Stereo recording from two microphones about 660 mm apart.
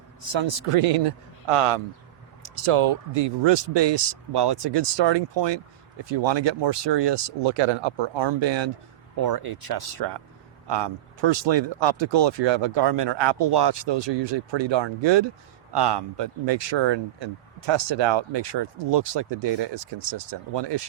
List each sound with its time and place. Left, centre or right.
0.3 s a man's voice: right